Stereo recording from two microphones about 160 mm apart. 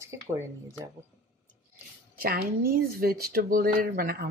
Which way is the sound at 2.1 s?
70° right (ahead or behind).